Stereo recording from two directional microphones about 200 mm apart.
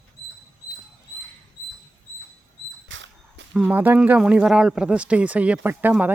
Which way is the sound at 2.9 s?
65° right (ahead or behind).